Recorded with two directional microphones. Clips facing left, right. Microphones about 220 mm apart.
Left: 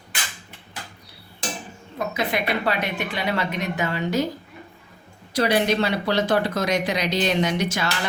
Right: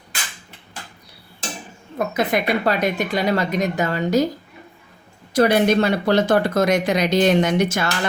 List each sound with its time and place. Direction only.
2.1 s speech: 45° right (ahead or behind)
5.3 s speech: 50° right (ahead or behind)